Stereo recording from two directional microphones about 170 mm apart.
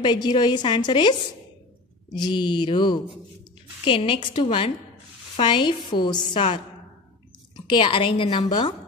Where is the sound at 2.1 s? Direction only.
25° left (ahead or behind).